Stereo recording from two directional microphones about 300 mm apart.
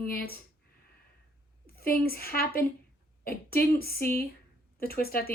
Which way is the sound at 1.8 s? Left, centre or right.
Left.